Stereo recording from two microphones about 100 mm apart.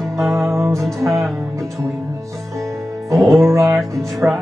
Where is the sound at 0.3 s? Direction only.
30° right (ahead or behind).